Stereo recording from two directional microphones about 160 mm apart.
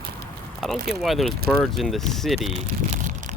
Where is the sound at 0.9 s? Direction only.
Centre (ahead or behind).